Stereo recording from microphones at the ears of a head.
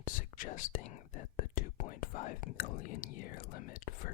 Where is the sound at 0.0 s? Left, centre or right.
Left.